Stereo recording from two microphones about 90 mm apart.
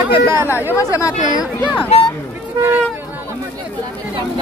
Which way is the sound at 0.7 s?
35° left (ahead or behind).